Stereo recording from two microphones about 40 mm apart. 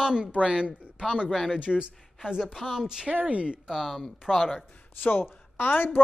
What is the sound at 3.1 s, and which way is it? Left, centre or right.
Speech, right.